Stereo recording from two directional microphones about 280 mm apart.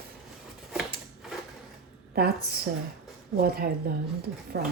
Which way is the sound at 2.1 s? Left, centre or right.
Right.